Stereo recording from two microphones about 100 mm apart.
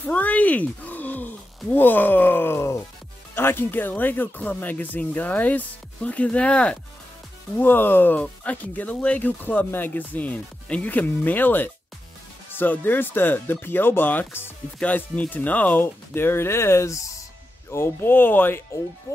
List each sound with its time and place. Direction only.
0.0 s speech: 15° left (ahead or behind)
19.1 s speech: 30° left (ahead or behind)